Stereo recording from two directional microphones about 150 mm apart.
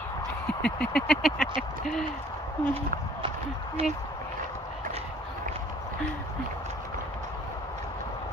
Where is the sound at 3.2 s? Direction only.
40° right (ahead or behind).